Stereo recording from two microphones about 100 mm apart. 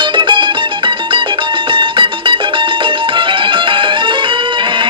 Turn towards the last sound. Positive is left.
turn(degrees=-55)  # may be behind; listen again after turning